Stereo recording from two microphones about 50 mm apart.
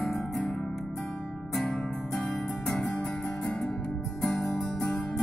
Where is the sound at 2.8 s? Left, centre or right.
Left.